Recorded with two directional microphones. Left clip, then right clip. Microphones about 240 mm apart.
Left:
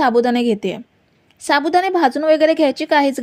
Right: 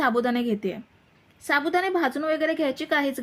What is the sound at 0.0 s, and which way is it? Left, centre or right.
A woman's voice, left.